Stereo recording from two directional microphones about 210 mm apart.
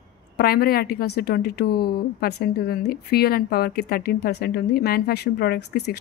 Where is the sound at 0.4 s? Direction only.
45° left (ahead or behind).